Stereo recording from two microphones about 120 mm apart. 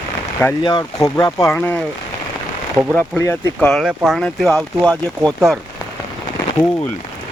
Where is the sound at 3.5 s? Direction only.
5° left (ahead or behind).